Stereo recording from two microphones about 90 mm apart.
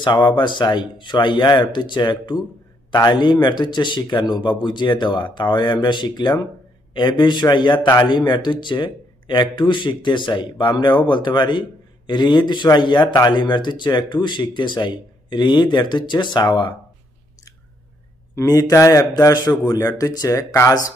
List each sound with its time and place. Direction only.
0.0 s speech: 55° left (ahead or behind)
18.3 s a man's voice: 40° left (ahead or behind)